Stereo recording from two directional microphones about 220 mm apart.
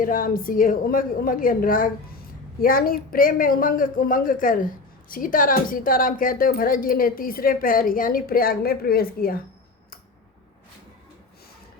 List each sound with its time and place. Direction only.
0.0 s a woman's voice: 40° left (ahead or behind)